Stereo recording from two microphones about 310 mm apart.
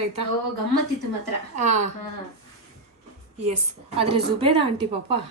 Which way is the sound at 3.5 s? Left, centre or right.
Centre.